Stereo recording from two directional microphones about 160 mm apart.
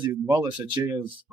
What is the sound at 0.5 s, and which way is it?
Speech, 30° right (ahead or behind).